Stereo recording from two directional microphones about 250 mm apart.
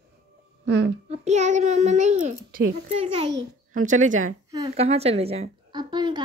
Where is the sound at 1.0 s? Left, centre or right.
Right.